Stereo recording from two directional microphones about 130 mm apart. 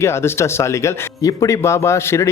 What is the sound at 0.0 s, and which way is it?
A man's voice, 20° left (ahead or behind).